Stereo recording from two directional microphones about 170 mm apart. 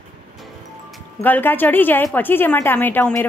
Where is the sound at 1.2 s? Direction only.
10° left (ahead or behind).